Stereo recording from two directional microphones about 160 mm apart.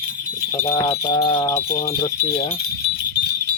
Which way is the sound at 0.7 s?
25° left (ahead or behind).